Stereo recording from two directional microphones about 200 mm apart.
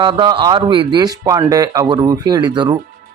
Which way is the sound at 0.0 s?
20° right (ahead or behind).